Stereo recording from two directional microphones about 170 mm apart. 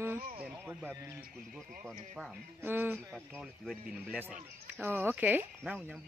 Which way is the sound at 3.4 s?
Centre (ahead or behind).